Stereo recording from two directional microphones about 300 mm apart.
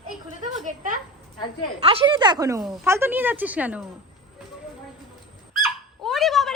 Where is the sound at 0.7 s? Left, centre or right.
Right; by 3.8 s centre.